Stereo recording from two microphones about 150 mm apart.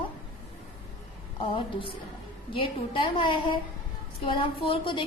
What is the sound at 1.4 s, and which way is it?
A woman's voice, 35° left (ahead or behind).